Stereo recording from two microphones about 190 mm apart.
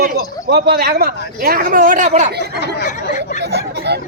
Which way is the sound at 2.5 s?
45° left (ahead or behind).